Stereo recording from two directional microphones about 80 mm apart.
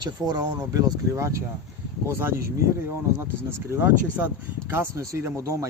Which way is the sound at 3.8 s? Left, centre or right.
Right.